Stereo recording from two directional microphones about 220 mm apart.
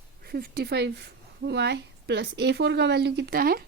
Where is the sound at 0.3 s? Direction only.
45° right (ahead or behind).